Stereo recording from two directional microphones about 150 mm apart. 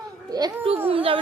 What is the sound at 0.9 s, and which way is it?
Speech, 40° right (ahead or behind).